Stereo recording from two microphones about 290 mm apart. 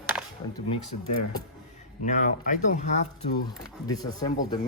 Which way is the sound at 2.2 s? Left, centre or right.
Left.